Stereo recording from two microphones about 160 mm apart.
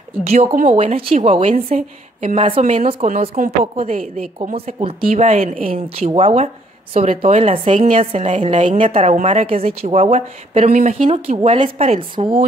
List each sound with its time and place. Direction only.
0.2 s speech: 40° right (ahead or behind)
1.7 s speech: 50° right (ahead or behind)
3.4 s speech: 55° right (ahead or behind); by 4.9 s 35° right (ahead or behind)
5.0 s speech: 50° right (ahead or behind); by 12.4 s 35° right (ahead or behind)